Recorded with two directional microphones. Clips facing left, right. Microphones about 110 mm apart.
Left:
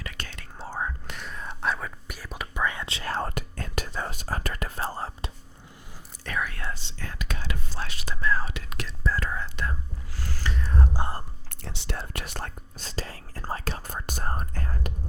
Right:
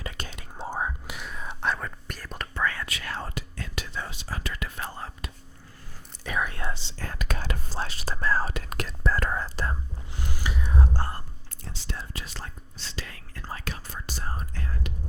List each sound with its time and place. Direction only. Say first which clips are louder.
0.0 s whispering: right 2 dB; 20° right (ahead or behind); by 2.6 s 10° left (ahead or behind)
2.6 s whispering: even; 25° left (ahead or behind)
3.2 s whispering: left 5 dB; 50° left (ahead or behind); by 5.3 s 35° left (ahead or behind)
6.4 s whispering: right 2 dB; 25° right (ahead or behind)
7.0 s whispering: right 3 dB; 45° right (ahead or behind)
10.2 s a sound: even; 15° right (ahead or behind)
11.6 s whispering: left 3 dB; 65° left (ahead or behind)
12.9 s whispering: left 4 dB; 35° left (ahead or behind)
13.8 s whispering: left 4 dB; 50° left (ahead or behind)